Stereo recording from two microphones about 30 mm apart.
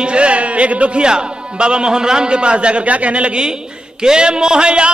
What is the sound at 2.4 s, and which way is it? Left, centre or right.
Music, right.